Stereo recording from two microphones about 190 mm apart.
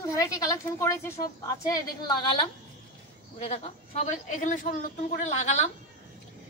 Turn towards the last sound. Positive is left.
turn(degrees=35)  # may be behind; listen again after turning